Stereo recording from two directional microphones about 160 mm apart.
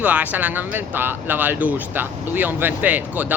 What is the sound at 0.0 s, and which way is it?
Speech, 10° right (ahead or behind).